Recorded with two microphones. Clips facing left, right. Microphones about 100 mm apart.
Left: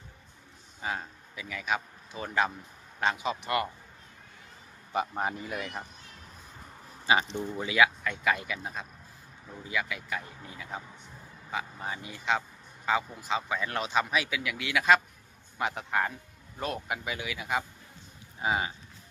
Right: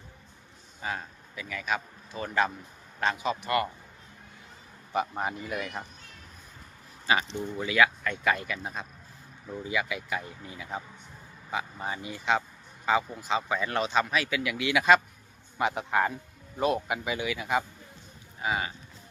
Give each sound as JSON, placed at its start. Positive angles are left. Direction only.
{"t": 0.8, "sound": "speech", "side_deg": 20}
{"t": 4.9, "sound": "speech", "side_deg": 25}
{"t": 7.3, "sound": "speech", "side_deg": 5}
{"t": 7.6, "sound": "speech", "side_deg": 20}
{"t": 8.0, "sound": "speech", "side_deg": 5}
{"t": 18.3, "sound": "speech", "side_deg": 20}